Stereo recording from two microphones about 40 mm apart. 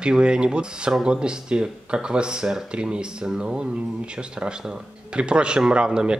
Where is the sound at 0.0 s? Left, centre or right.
Right.